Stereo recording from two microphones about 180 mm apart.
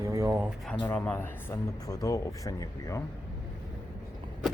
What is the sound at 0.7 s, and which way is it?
Speech, 10° left (ahead or behind).